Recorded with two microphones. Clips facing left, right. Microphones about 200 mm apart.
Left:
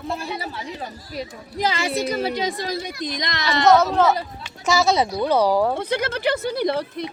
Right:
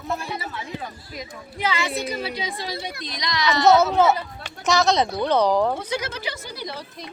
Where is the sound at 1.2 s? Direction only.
35° left (ahead or behind).